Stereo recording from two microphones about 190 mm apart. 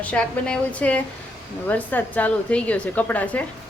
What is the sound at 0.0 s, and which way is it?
A woman's voice, 5° left (ahead or behind).